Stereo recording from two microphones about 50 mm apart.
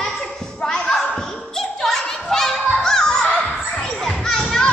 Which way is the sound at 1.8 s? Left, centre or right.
Centre.